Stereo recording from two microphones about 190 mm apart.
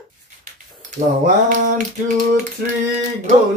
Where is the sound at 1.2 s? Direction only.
40° right (ahead or behind).